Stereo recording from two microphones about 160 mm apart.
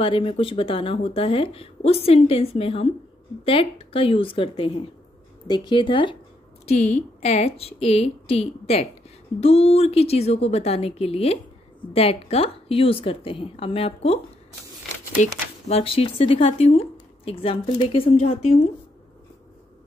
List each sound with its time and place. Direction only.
0.0 s speech: 35° left (ahead or behind)
6.6 s a woman's voice: 40° left (ahead or behind)
15.7 s speech: 35° left (ahead or behind)